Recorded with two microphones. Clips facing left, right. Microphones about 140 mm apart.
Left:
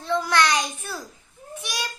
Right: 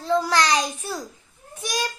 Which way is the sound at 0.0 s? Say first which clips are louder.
Right 1 dB; 35° right (ahead or behind).